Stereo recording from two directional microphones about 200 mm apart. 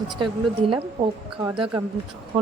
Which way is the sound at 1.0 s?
15° right (ahead or behind).